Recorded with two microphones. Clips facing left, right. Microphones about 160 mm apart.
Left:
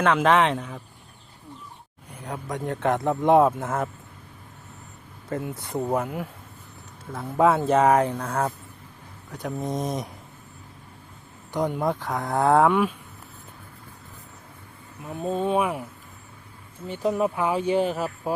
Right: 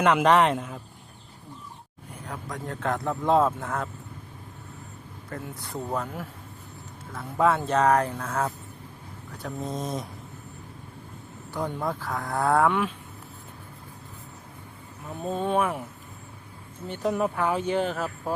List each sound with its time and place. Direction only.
0.0 s speech: 5° right (ahead or behind)
2.2 s speech: 20° left (ahead or behind)
5.3 s speech: 20° left (ahead or behind)
7.1 s speech: 25° left (ahead or behind)
7.9 s speech: centre (ahead or behind)
11.5 s speech: 15° left (ahead or behind)
15.1 s speech: centre (ahead or behind)
16.9 s speech: centre (ahead or behind)